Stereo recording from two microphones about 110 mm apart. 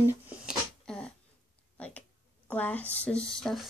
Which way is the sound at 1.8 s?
10° left (ahead or behind).